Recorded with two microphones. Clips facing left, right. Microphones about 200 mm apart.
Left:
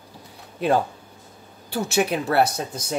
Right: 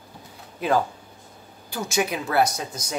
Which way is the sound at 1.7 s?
65° left (ahead or behind).